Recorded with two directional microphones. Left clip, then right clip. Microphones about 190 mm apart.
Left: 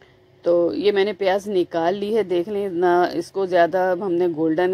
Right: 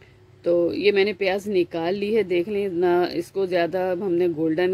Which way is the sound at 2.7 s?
10° right (ahead or behind).